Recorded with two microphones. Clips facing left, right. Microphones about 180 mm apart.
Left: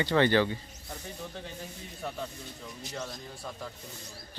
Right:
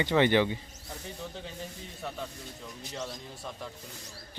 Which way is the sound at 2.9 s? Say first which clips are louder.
Right 1 dB; 5° right (ahead or behind).